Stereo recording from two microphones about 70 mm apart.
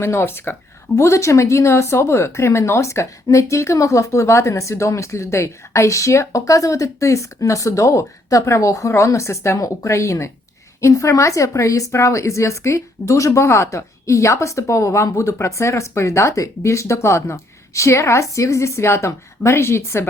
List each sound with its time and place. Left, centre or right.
0.0 s speech: left
0.9 s speech: left